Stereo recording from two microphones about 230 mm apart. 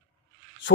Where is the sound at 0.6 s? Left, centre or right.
Left.